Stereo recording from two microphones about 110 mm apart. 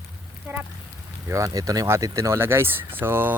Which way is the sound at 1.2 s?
30° right (ahead or behind).